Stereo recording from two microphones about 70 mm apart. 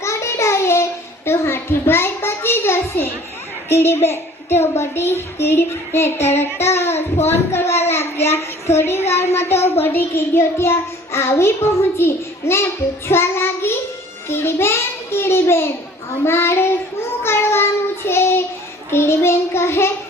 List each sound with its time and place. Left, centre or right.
0.0 s child singing: left
1.9 s a sound: left
3.7 s a child's voice: left
17.2 s child singing: left
18.9 s a child's voice: left